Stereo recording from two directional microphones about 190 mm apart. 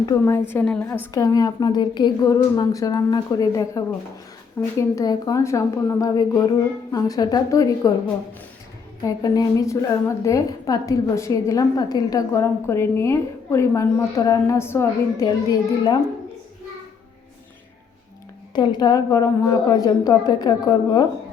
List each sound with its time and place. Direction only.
0.0 s a woman's voice: 15° left (ahead or behind)
9.0 s a woman's voice: 20° left (ahead or behind)
18.5 s a woman's voice: 25° left (ahead or behind)